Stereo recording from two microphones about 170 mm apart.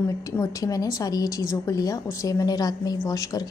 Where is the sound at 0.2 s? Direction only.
20° left (ahead or behind).